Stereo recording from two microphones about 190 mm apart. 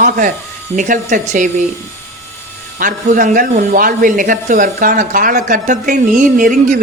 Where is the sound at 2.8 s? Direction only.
45° right (ahead or behind).